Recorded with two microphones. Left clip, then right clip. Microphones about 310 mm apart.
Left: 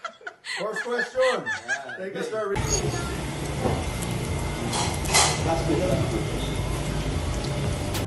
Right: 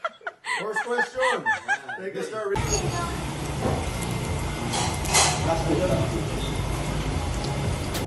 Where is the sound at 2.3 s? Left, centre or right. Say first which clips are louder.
Even; centre.